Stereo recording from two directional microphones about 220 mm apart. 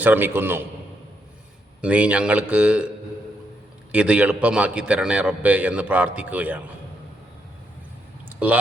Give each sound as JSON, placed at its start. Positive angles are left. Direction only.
{"t": 0.0, "sound": "a man's voice", "side_deg": -10}
{"t": 1.8, "sound": "a man's voice", "side_deg": -5}
{"t": 3.9, "sound": "a man's voice", "side_deg": -5}
{"t": 8.3, "sound": "a sound", "side_deg": -10}